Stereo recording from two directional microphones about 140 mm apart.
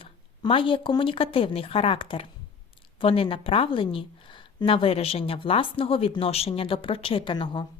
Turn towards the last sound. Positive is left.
turn(degrees=35)  # may be behind; listen again after turning